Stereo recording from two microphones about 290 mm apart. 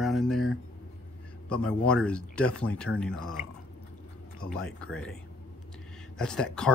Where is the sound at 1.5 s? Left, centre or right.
Centre.